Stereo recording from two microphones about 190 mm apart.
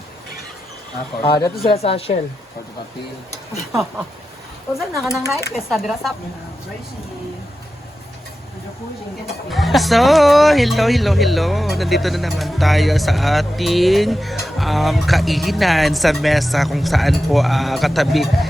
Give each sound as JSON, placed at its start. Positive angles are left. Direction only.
{"t": 1.2, "sound": "speech", "side_deg": 20}
{"t": 1.6, "sound": "speech", "side_deg": 30}
{"t": 4.7, "sound": "speech", "side_deg": 0}
{"t": 9.5, "sound": "speech", "side_deg": 0}